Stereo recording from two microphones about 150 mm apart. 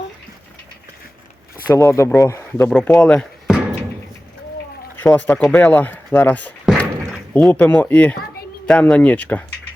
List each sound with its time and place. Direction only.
1.7 s speech: 20° left (ahead or behind); by 3.8 s centre (ahead or behind)
5.0 s speech: 10° left (ahead or behind)
6.7 s slam: centre (ahead or behind)
7.4 s speech: 10° left (ahead or behind)